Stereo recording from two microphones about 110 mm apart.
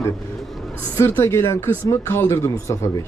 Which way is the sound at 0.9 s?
25° left (ahead or behind).